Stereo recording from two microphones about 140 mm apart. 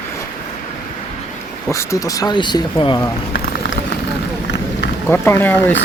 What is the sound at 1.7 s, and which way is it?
Speech, 25° left (ahead or behind).